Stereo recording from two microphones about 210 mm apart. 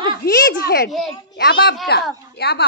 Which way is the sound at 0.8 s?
Centre (ahead or behind).